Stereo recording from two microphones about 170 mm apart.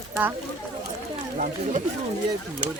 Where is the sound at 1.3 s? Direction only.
50° right (ahead or behind).